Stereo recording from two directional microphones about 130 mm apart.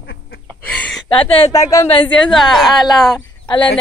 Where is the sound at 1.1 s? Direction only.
45° left (ahead or behind).